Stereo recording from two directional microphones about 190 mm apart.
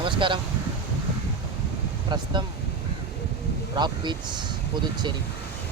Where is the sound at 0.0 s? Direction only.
25° right (ahead or behind).